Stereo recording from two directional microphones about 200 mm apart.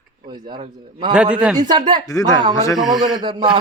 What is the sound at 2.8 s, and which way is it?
Speech, centre (ahead or behind).